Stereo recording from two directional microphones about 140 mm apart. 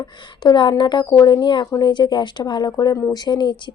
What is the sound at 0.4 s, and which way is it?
Speech, 30° left (ahead or behind).